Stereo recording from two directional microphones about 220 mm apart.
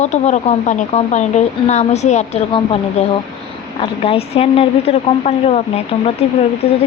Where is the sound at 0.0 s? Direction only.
30° left (ahead or behind).